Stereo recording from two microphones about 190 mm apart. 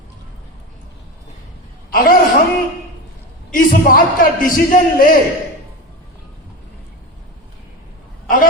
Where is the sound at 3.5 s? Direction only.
45° left (ahead or behind).